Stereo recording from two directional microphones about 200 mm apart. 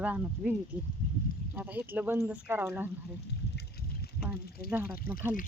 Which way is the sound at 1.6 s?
10° right (ahead or behind).